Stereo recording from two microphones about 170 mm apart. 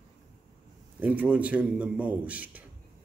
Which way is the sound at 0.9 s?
10° right (ahead or behind).